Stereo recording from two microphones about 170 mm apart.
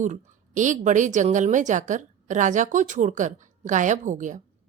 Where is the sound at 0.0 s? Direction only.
45° right (ahead or behind).